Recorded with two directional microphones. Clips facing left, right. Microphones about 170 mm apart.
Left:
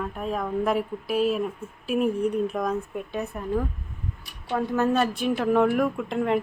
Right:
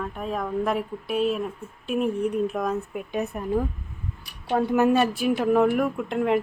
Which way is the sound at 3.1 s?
15° right (ahead or behind).